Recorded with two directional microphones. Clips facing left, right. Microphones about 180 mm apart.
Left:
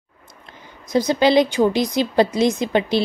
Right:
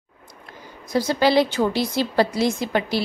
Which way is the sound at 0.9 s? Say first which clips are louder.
Left 3 dB; 20° left (ahead or behind).